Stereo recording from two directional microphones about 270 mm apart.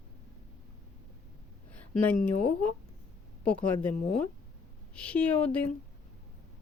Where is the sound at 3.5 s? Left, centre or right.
Centre.